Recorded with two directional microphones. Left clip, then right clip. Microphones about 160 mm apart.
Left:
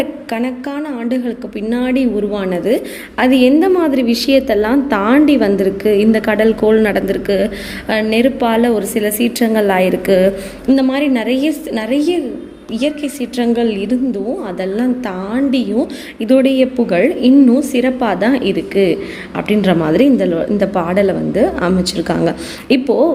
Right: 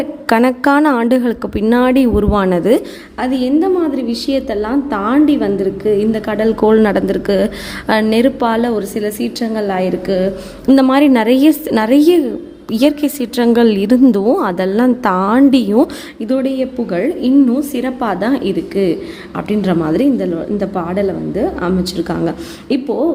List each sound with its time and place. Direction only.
0.3 s a woman's voice: 55° right (ahead or behind); by 2.8 s 40° right (ahead or behind)
3.2 s a woman's voice: 5° left (ahead or behind)
6.6 s a woman's voice: 30° right (ahead or behind); by 10.3 s centre (ahead or behind)
10.7 s a woman's voice: 45° right (ahead or behind)
16.2 s a woman's voice: centre (ahead or behind)